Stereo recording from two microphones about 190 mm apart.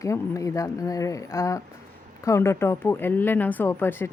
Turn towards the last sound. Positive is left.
turn(degrees=10)  # may be behind; listen again after turning